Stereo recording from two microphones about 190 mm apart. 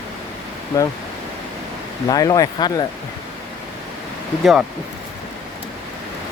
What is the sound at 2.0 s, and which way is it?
Speech, 20° left (ahead or behind).